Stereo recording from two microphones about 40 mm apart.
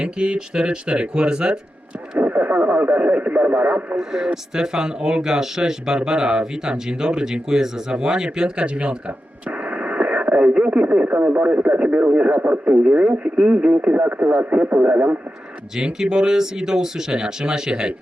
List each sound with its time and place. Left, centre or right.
0.0 s speech: right
2.1 s speech: right
3.9 s speech: centre; by 15.2 s right
15.7 s speech: centre